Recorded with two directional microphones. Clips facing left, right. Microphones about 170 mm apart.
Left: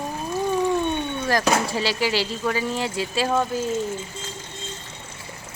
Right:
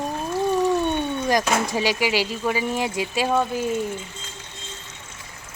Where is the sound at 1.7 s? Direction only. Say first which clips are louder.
Right 1 dB; 15° right (ahead or behind).